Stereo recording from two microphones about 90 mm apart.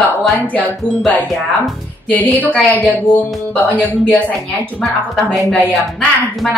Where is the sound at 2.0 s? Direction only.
15° left (ahead or behind).